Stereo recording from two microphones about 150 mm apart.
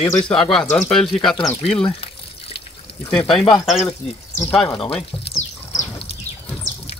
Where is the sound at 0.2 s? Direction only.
5° left (ahead or behind).